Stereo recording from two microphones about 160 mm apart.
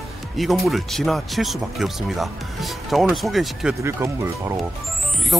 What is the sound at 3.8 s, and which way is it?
Speech, 15° right (ahead or behind).